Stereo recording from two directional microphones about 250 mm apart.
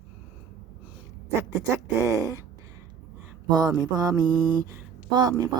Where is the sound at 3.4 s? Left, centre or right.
Centre.